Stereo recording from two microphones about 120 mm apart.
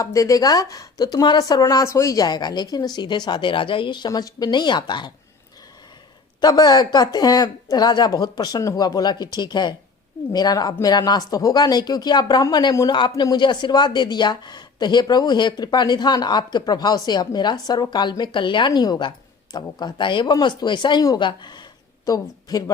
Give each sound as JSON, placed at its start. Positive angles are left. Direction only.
{"t": 0.0, "sound": "a woman's voice", "side_deg": 25}
{"t": 6.4, "sound": "a woman's voice", "side_deg": 35}